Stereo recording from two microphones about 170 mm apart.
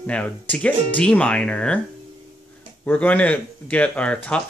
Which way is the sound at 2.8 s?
10° left (ahead or behind).